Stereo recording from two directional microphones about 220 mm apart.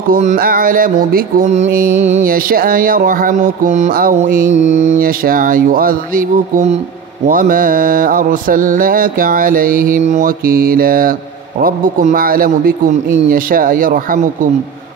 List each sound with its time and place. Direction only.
0.1 s mantra: 35° right (ahead or behind)